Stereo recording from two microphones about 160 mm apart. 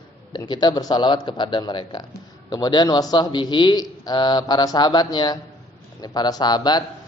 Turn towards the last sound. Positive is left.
turn(degrees=25)  # may be behind; listen again after turning